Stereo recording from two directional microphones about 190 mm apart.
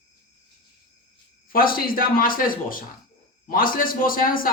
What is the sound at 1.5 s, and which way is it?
Speech, 50° left (ahead or behind).